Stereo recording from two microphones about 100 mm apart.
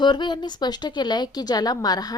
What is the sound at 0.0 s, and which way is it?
A woman's voice, 50° left (ahead or behind).